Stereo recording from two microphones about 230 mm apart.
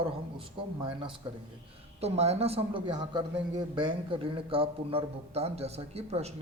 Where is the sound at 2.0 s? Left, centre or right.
Right.